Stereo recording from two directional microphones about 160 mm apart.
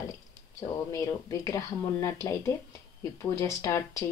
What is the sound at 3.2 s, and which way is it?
Speech, 20° left (ahead or behind).